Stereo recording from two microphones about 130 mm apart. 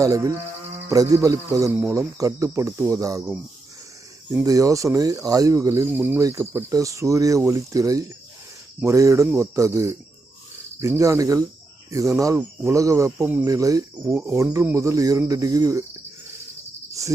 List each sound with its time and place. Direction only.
0.0 s speech: 25° right (ahead or behind)
4.3 s speech: 25° right (ahead or behind)
13.2 s speech: 15° right (ahead or behind)
13.5 s speech: 25° right (ahead or behind)
17.0 s speech: 25° right (ahead or behind)